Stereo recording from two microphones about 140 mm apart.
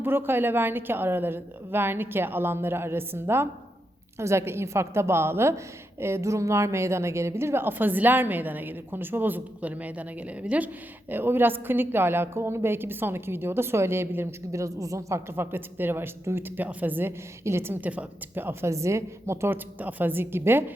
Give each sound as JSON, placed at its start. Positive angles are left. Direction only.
{"t": 0.0, "sound": "a woman's voice", "side_deg": -15}